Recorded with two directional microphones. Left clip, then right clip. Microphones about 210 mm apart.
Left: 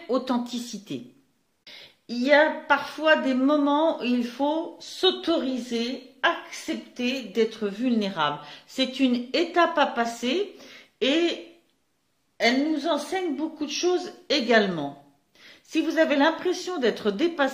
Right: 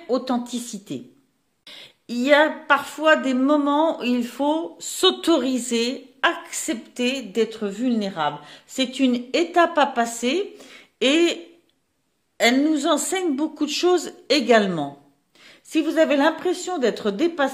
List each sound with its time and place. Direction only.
0.1 s a woman's voice: 25° right (ahead or behind)
2.0 s speech: 35° right (ahead or behind)
8.6 s speech: 35° right (ahead or behind); by 11.3 s 50° right (ahead or behind)
12.4 s a woman's voice: 55° right (ahead or behind); by 17.5 s 30° right (ahead or behind)